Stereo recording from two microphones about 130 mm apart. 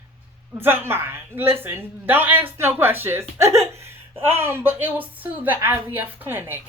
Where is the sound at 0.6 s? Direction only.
20° right (ahead or behind).